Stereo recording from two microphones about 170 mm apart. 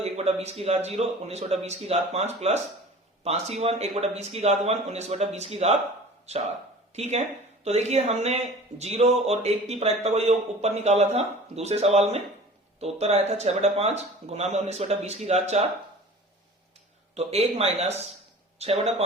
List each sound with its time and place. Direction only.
0.0 s a man's voice: 40° right (ahead or behind)
17.2 s speech: 35° right (ahead or behind)